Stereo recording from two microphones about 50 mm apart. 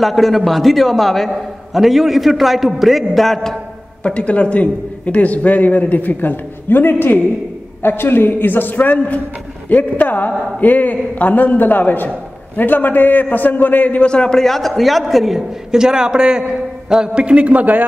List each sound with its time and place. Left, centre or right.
0.0 s a man's voice: centre
4.0 s a man's voice: left
14.0 s a man's voice: centre; by 17.8 s right